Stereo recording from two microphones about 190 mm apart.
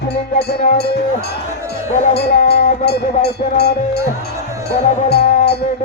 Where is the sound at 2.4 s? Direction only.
60° left (ahead or behind).